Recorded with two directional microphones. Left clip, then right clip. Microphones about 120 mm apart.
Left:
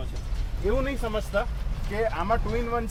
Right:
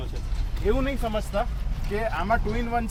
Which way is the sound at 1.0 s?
20° left (ahead or behind).